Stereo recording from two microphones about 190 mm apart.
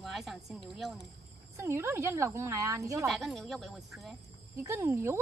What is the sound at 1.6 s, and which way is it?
A woman's voice, 15° right (ahead or behind).